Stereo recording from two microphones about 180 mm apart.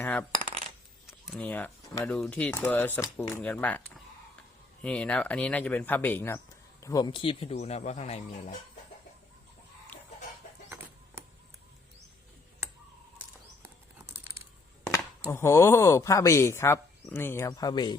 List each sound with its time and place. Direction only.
0.0 s coin: 10° left (ahead or behind)
0.3 s coin: 35° right (ahead or behind)
1.0 s a sound: centre (ahead or behind)
2.0 s speech: 5° left (ahead or behind)
6.8 s speech: 25° left (ahead or behind)
15.3 s speech: 15° left (ahead or behind)